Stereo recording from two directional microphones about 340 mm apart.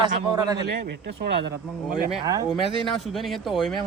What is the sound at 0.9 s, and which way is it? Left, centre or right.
Speech, right.